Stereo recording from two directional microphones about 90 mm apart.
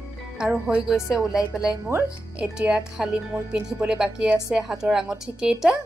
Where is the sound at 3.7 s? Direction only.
10° right (ahead or behind).